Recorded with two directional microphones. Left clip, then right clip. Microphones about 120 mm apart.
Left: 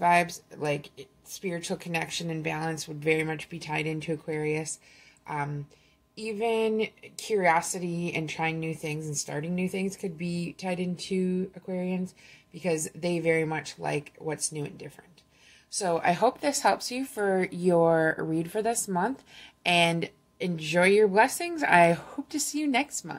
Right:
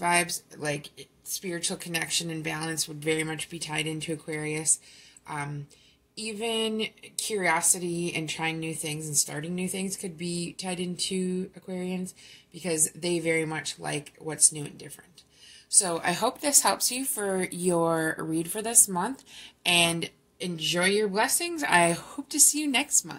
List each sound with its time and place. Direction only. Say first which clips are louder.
0.0 s a woman's voice: left 3 dB; 50° left (ahead or behind)